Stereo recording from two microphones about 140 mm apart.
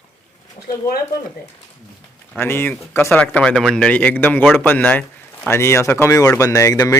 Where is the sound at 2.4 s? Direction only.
15° left (ahead or behind).